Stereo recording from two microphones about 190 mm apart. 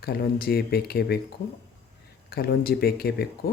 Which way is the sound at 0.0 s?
55° left (ahead or behind).